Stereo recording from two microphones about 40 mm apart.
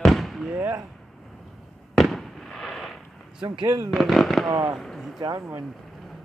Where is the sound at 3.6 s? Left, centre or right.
Right.